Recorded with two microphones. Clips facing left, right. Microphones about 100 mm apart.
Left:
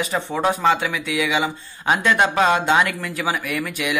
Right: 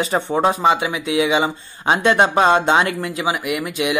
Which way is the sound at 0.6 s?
20° right (ahead or behind).